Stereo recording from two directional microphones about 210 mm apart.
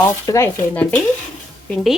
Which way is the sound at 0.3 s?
15° left (ahead or behind).